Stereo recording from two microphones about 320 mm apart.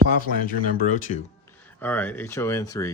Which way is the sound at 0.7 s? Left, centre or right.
Left.